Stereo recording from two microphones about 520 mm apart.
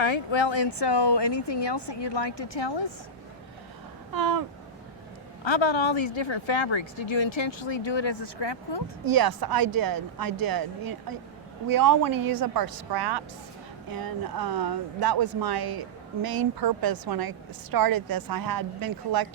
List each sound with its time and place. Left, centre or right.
0.0 s speech: left
4.1 s speech: right
5.5 s speech: left
9.0 s speech: right